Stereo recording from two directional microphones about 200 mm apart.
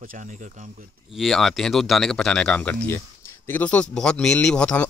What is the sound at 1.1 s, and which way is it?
Speech, centre (ahead or behind).